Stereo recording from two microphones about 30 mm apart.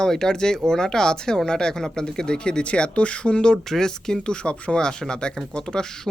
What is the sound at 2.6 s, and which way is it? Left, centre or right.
Speech, left.